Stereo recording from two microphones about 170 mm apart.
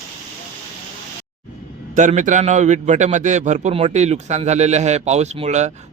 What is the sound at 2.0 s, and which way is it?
A man's voice, 45° right (ahead or behind).